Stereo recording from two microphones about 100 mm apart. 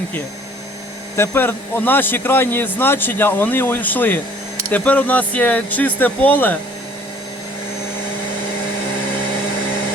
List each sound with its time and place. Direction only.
1.1 s speech: 25° left (ahead or behind)